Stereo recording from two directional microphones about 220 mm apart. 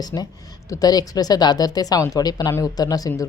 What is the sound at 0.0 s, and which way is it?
Speech, 15° left (ahead or behind).